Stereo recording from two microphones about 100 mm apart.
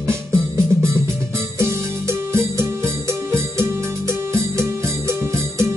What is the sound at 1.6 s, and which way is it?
Music, 25° right (ahead or behind).